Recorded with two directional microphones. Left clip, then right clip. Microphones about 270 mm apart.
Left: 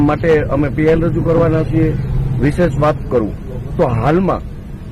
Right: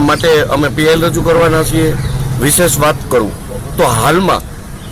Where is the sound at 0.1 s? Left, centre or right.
Centre.